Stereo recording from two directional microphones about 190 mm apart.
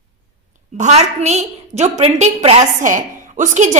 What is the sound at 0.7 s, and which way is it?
A woman's voice, 35° right (ahead or behind).